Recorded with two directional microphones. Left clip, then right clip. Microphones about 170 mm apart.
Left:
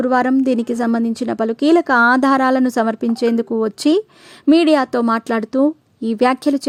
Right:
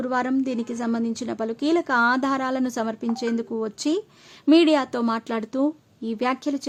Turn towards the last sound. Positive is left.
turn(degrees=45)  # may be behind; listen again after turning